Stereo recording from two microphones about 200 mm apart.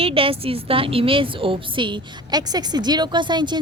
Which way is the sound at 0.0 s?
30° right (ahead or behind).